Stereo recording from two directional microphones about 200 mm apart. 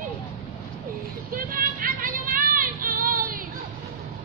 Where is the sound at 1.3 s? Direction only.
45° right (ahead or behind).